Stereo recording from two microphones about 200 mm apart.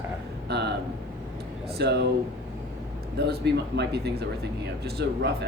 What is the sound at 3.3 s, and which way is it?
Speech, 55° right (ahead or behind).